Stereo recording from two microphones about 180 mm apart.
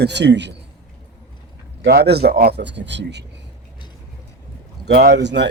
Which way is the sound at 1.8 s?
65° right (ahead or behind).